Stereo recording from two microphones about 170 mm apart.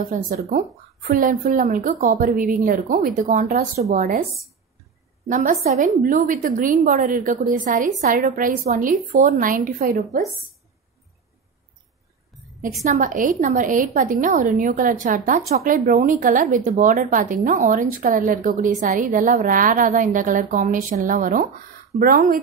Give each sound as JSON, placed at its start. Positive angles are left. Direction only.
{"t": 0.0, "sound": "a woman's voice", "side_deg": -60}
{"t": 5.3, "sound": "a woman's voice", "side_deg": -50}
{"t": 12.8, "sound": "a woman's voice", "side_deg": -45}